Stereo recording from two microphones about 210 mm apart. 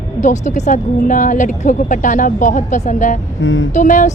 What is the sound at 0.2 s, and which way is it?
A woman's voice, 35° left (ahead or behind).